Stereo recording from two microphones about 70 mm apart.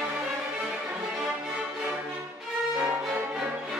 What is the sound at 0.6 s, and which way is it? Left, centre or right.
Violin, right.